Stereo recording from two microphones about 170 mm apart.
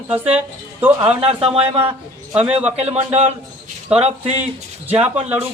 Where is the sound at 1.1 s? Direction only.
35° right (ahead or behind).